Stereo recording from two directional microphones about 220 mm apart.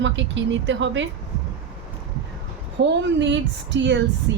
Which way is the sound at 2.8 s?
55° right (ahead or behind).